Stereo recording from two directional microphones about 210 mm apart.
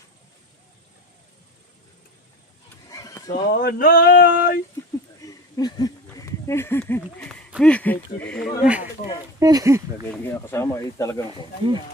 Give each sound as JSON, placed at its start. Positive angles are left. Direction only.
{"t": 2.9, "sound": "horse", "side_deg": 15}
{"t": 3.5, "sound": "a sound", "side_deg": 45}
{"t": 5.2, "sound": "a sound", "side_deg": 20}
{"t": 7.2, "sound": "speech", "side_deg": 5}
{"t": 8.6, "sound": "speech", "side_deg": -5}
{"t": 9.4, "sound": "speech", "side_deg": -15}
{"t": 10.1, "sound": "speech", "side_deg": 10}
{"t": 11.3, "sound": "speech", "side_deg": -20}